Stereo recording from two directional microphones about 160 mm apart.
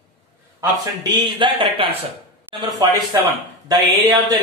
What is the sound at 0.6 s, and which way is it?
Speech, 30° right (ahead or behind).